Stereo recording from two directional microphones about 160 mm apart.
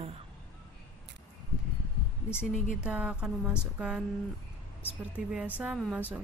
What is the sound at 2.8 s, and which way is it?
A woman's voice, 5° right (ahead or behind).